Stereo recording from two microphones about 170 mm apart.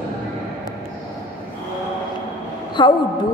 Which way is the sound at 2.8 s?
25° left (ahead or behind).